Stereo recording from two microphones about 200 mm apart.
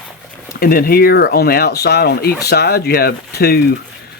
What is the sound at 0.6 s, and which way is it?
Speech, 45° left (ahead or behind).